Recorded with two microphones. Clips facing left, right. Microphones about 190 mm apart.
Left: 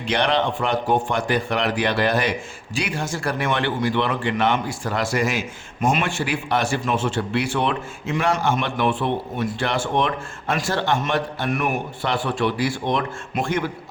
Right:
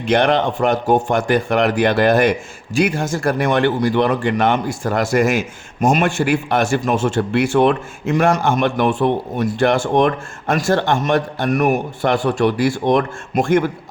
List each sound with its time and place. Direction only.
0.1 s speech: 50° right (ahead or behind)